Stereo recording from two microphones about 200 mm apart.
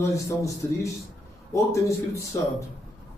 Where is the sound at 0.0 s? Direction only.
15° left (ahead or behind).